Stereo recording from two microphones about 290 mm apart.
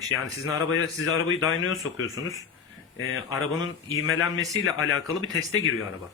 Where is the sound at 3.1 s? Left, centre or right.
Left.